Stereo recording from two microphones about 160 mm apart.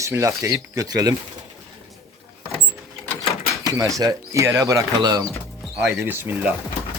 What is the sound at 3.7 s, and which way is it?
Speech, 20° right (ahead or behind).